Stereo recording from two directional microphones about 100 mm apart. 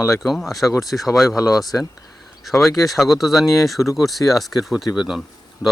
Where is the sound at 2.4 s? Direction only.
Centre (ahead or behind).